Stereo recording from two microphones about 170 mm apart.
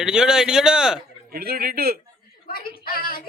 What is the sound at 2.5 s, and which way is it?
Speech, 60° left (ahead or behind).